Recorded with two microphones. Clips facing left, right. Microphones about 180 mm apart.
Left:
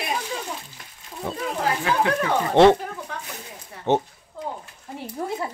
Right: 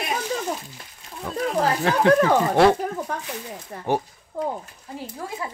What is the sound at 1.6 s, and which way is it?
Speech, 40° right (ahead or behind).